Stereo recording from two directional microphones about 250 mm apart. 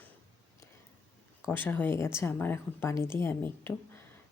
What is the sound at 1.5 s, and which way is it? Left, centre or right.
A woman's voice, centre.